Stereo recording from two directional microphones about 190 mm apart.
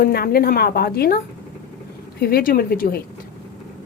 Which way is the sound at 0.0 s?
55° left (ahead or behind).